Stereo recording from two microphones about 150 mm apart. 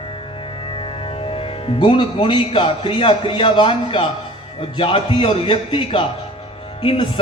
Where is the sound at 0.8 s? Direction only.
40° left (ahead or behind).